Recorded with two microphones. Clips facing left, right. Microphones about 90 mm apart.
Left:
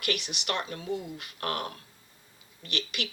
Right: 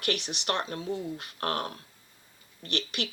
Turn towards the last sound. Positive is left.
turn(degrees=-30)  # may be behind; listen again after turning